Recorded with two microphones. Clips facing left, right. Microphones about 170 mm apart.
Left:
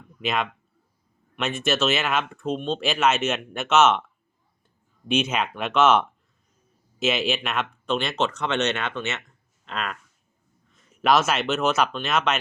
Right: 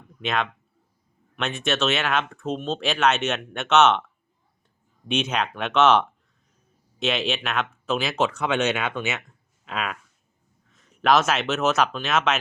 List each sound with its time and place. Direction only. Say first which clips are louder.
0.2 s speech: even; centre (ahead or behind)
5.0 s speech: left 1 dB; centre (ahead or behind)